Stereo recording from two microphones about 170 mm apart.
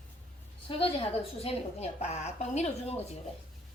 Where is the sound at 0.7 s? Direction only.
30° left (ahead or behind).